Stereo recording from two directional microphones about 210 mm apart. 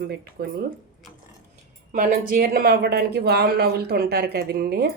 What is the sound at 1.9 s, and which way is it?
Speech, 40° right (ahead or behind).